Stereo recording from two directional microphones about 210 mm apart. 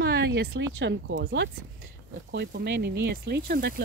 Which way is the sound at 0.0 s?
55° right (ahead or behind).